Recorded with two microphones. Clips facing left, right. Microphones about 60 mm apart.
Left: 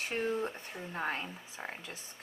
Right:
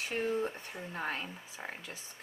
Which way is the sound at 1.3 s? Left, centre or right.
Centre.